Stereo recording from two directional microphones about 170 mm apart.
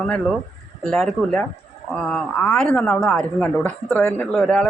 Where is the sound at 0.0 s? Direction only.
5° left (ahead or behind).